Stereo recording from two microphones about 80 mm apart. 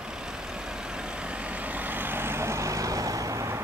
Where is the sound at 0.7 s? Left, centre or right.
Centre.